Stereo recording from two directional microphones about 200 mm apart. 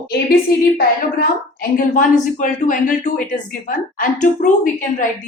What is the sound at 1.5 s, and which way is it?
Speech, 40° left (ahead or behind).